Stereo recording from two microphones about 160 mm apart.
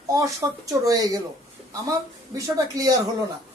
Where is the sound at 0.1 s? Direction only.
20° right (ahead or behind).